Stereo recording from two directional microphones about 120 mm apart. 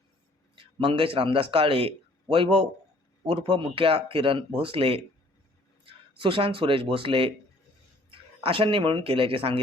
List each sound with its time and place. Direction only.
0.6 s speech: 50° right (ahead or behind)